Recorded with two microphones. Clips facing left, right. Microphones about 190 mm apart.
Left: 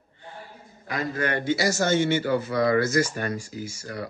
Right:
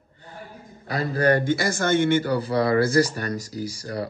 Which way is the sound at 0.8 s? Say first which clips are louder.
Right 6 dB; 35° right (ahead or behind).